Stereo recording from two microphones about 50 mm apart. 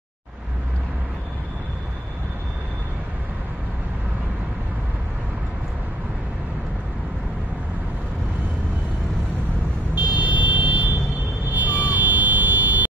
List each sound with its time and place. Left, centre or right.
9.9 s vehicle: right